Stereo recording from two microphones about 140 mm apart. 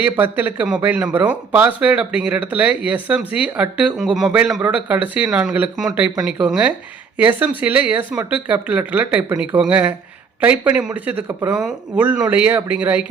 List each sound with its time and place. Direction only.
0.0 s speech: 15° right (ahead or behind)